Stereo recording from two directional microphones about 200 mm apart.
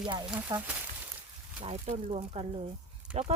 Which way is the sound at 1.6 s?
35° right (ahead or behind).